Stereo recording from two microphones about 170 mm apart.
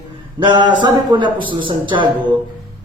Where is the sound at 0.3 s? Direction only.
25° right (ahead or behind).